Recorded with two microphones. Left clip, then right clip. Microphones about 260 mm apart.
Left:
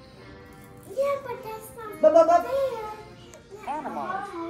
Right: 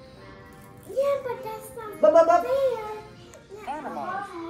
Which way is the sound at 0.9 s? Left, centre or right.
Centre.